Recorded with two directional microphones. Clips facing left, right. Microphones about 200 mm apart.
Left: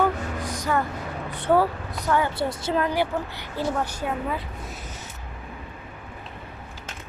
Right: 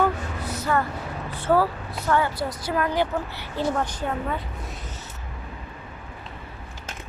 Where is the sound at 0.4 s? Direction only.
15° left (ahead or behind).